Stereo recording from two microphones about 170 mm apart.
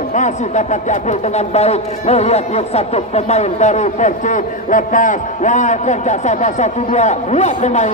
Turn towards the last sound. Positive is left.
turn(degrees=40)  # may be behind; listen again after turning